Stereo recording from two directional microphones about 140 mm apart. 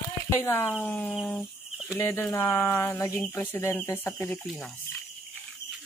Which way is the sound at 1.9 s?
15° left (ahead or behind).